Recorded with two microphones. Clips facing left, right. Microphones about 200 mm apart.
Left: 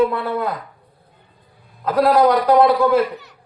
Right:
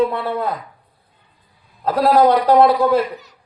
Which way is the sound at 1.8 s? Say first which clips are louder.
Right 1 dB; 30° right (ahead or behind).